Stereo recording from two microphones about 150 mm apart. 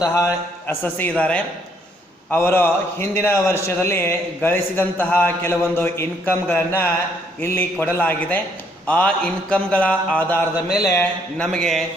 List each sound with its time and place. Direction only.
0.0 s a man's voice: 20° left (ahead or behind)
10.8 s a man's voice: 20° left (ahead or behind)
11.3 s speech: 5° left (ahead or behind)